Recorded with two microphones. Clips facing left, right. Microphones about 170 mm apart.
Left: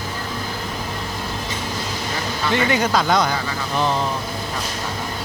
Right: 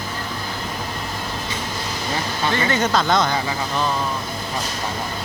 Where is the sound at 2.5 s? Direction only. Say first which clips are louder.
Left 2 dB; 15° left (ahead or behind).